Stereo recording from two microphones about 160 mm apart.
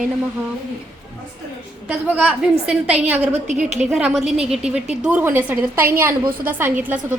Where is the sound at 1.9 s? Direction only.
10° right (ahead or behind).